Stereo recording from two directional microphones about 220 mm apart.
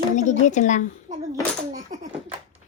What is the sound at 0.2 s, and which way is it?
Speech, 35° left (ahead or behind).